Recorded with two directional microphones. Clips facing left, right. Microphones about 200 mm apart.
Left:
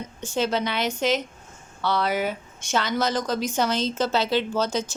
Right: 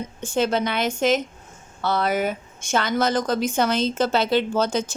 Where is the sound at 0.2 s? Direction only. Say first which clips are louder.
Right 3 dB; 50° right (ahead or behind).